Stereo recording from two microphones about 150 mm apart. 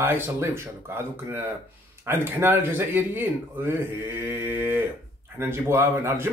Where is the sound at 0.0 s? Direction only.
15° right (ahead or behind).